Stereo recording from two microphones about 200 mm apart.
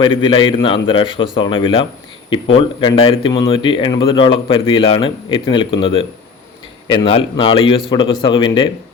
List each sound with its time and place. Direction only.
0.0 s speech: 25° left (ahead or behind)